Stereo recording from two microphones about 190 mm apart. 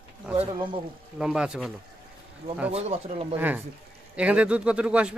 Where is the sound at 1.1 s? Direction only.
5° right (ahead or behind).